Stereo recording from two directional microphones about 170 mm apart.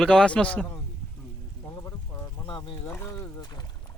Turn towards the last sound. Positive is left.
turn(degrees=25)  # may be behind; listen again after turning